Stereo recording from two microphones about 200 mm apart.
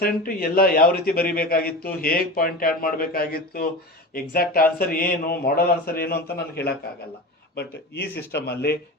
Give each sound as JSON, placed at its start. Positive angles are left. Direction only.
{"t": 0.0, "sound": "a man's voice", "side_deg": 45}